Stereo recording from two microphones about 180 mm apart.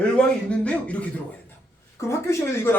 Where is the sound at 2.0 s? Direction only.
15° left (ahead or behind).